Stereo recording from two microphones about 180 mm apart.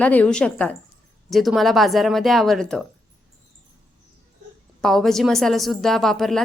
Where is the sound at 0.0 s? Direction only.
10° left (ahead or behind).